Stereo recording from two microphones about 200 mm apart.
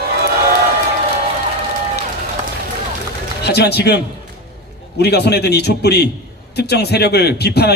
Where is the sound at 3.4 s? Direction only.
55° left (ahead or behind).